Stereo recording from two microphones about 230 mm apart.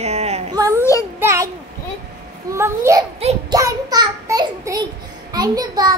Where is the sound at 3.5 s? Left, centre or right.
Centre.